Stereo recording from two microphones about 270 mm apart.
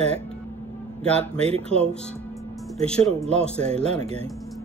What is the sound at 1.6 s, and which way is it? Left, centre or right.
Speech, centre.